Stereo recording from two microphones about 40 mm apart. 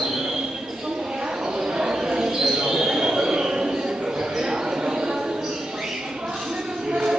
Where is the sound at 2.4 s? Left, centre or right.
Centre.